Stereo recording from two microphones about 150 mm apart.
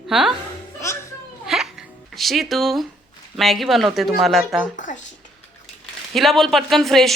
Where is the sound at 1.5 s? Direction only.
Centre (ahead or behind).